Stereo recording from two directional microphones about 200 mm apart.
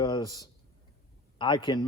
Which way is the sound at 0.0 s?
20° left (ahead or behind).